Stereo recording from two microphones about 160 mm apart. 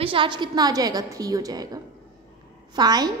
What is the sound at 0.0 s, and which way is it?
A woman's voice, 35° right (ahead or behind).